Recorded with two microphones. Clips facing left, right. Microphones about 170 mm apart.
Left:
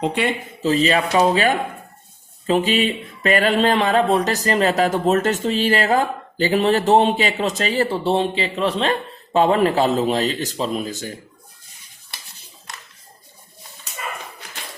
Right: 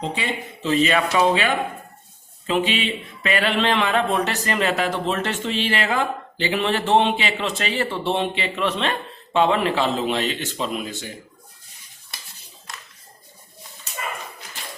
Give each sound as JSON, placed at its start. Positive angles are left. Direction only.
{"t": 0.0, "sound": "speech", "side_deg": 60}
{"t": 0.6, "sound": "a man's voice", "side_deg": 35}